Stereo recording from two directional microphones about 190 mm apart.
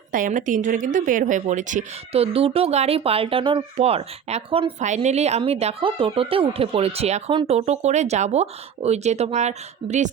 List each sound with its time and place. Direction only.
0.1 s speech: 45° right (ahead or behind)